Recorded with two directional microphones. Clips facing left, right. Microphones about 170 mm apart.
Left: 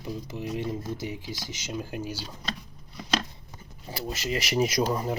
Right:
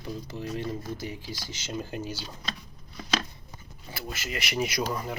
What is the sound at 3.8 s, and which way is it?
Speech, 35° left (ahead or behind).